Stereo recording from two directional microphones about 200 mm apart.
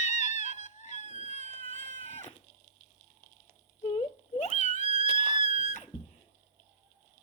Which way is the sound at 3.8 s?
35° left (ahead or behind).